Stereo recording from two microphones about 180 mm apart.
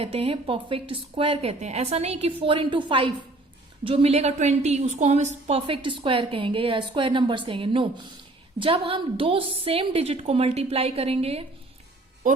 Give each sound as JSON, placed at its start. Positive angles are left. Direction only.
{"t": 0.0, "sound": "a woman's voice", "side_deg": -30}